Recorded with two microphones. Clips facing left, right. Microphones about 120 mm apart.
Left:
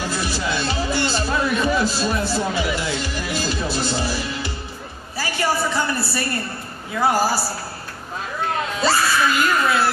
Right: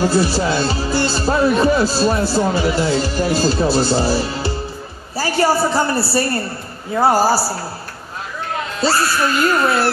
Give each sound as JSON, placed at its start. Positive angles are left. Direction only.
{"t": 0.0, "sound": "speech", "side_deg": -35}
{"t": 9.5, "sound": "speech", "side_deg": -35}